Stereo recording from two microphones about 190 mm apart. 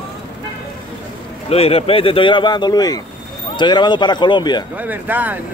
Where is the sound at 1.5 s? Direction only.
30° left (ahead or behind).